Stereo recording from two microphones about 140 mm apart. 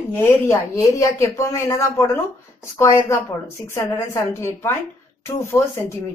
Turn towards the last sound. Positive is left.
turn(degrees=20)  # may be behind; listen again after turning